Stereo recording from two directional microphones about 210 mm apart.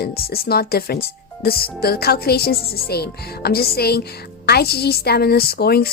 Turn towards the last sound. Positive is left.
turn(degrees=50)  # may be behind; listen again after turning